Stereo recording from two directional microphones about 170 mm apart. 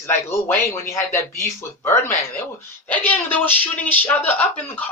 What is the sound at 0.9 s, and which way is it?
Speech, 15° left (ahead or behind).